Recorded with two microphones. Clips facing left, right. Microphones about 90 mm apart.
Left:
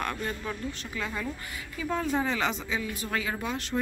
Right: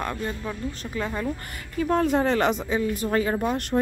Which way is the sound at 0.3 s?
15° right (ahead or behind).